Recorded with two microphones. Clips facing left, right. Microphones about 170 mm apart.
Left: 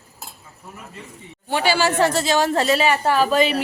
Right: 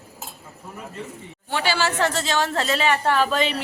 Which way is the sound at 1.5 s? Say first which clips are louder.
Left 4 dB; 15° left (ahead or behind).